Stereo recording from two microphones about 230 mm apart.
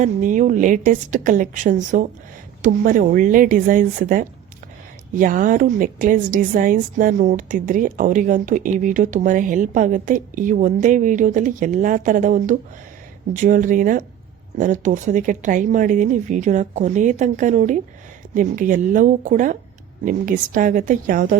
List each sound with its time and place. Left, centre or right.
0.0 s a woman's voice: right